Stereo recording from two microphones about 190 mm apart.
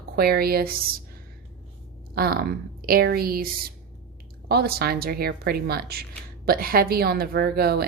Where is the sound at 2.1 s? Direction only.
50° right (ahead or behind).